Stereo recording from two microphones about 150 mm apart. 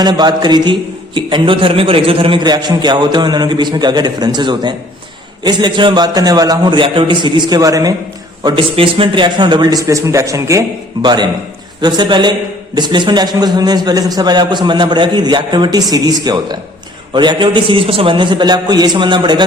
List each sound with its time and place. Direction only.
0.0 s a man's voice: 30° right (ahead or behind)
8.4 s a man's voice: 35° right (ahead or behind)